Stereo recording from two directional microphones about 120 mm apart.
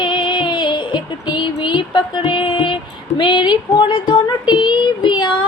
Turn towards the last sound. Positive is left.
turn(degrees=40)  # may be behind; listen again after turning